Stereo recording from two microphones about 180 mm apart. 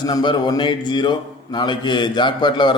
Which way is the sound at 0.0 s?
25° left (ahead or behind).